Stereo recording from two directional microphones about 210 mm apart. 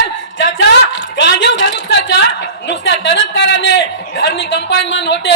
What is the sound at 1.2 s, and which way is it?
A man's voice, 55° left (ahead or behind).